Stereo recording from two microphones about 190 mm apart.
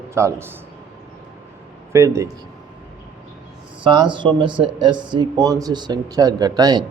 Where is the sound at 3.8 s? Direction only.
25° right (ahead or behind).